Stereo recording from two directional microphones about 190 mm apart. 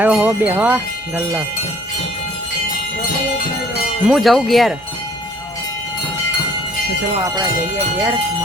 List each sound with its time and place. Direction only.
0.0 s speech: 10° right (ahead or behind)
4.0 s speech: centre (ahead or behind)